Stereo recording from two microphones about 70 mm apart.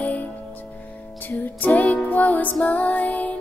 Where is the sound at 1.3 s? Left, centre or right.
Left.